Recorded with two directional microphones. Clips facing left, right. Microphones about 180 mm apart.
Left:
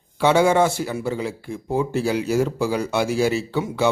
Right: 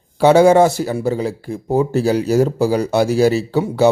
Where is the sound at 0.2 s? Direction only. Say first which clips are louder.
Right 7 dB; 40° right (ahead or behind).